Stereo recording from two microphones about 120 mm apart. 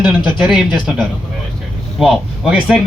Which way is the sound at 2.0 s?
5° right (ahead or behind).